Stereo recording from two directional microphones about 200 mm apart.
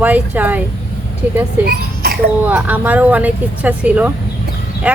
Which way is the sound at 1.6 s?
50° right (ahead or behind).